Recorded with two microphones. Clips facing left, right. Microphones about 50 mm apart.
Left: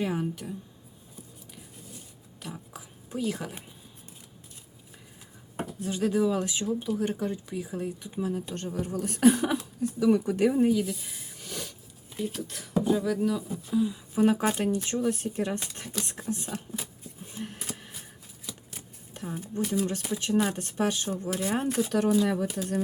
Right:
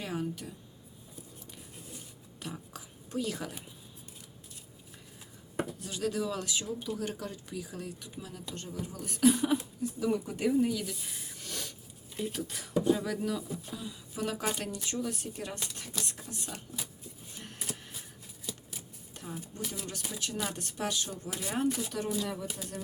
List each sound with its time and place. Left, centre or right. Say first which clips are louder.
0.0 s speech: left 6 dB; centre
2.4 s whispering: left 1 dB; centre
5.8 s speech: left 10 dB; left
8.5 s a woman's voice: left 8 dB; left
9.6 s speech: left 5 dB; left
10.7 s speech: left 9 dB; centre
11.0 s a sound: left 1 dB; centre
12.1 s speech: left 2 dB; centre
13.7 s speech: left 17 dB; centre
17.3 s a sound: left 5 dB; centre
19.1 s speech: left 8 dB; left
21.7 s a woman's voice: left 6 dB; left
22.3 s speech: left 9 dB; left